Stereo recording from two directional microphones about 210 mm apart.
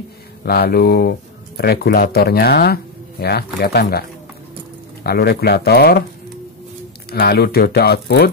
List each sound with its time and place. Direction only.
0.5 s speech: 45° left (ahead or behind)
5.0 s speech: 50° left (ahead or behind)
7.1 s speech: 50° left (ahead or behind)